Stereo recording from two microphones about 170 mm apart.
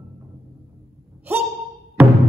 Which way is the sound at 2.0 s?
10° right (ahead or behind).